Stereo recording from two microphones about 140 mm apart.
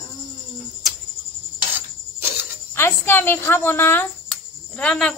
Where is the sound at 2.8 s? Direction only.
15° left (ahead or behind).